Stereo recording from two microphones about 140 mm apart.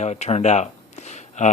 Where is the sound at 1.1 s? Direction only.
55° left (ahead or behind).